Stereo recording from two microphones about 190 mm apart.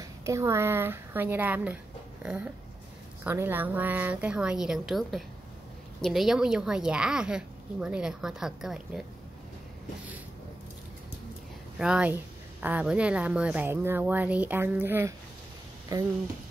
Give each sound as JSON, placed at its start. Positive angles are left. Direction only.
{"t": 0.0, "sound": "a woman's voice", "side_deg": -15}
{"t": 11.8, "sound": "a woman's voice", "side_deg": -5}